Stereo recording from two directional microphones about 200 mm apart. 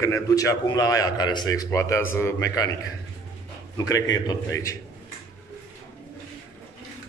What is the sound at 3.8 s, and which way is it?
Speech, 20° left (ahead or behind).